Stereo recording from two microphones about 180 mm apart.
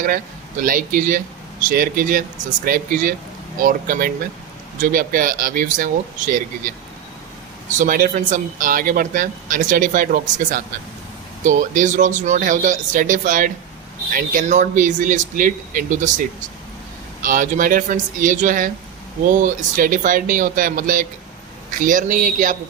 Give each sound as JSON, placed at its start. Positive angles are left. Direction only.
{"t": 0.6, "sound": "speech", "side_deg": -50}
{"t": 17.2, "sound": "speech", "side_deg": -45}